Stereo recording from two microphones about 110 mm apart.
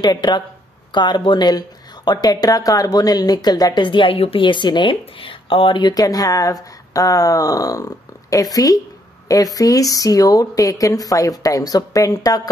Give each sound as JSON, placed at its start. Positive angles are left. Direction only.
{"t": 0.0, "sound": "speech", "side_deg": 40}